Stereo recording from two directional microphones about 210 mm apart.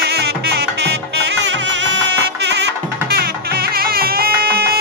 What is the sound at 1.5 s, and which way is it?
Music, 60° right (ahead or behind).